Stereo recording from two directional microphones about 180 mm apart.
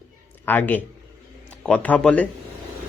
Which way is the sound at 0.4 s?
10° left (ahead or behind).